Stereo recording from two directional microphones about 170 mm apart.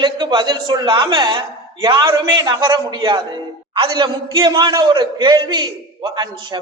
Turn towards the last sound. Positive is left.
turn(degrees=-25)  # may be behind; listen again after turning